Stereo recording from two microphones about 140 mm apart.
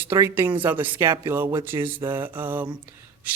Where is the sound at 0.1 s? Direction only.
20° right (ahead or behind).